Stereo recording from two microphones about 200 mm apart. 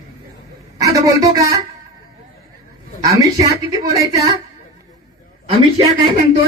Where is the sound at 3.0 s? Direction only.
15° right (ahead or behind).